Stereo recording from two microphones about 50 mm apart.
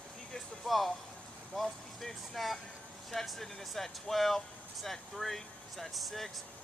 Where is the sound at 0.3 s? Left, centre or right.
Centre.